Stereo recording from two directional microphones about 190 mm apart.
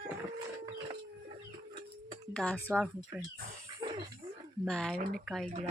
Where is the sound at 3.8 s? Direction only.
25° right (ahead or behind).